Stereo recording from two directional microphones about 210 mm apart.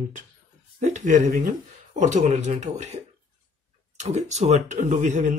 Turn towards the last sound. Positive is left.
turn(degrees=-35)  # may be behind; listen again after turning